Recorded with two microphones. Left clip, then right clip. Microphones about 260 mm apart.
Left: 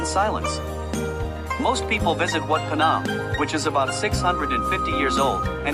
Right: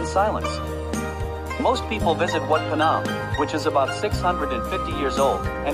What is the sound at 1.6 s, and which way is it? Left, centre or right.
Speech, left.